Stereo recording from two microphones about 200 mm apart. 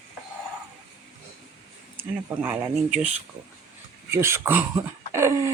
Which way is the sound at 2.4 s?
10° right (ahead or behind).